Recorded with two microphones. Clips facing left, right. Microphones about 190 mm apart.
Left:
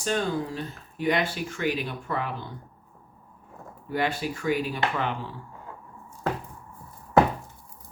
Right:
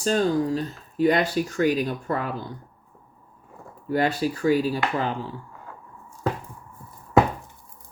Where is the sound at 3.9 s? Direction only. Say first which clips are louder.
Right 5 dB; 40° right (ahead or behind).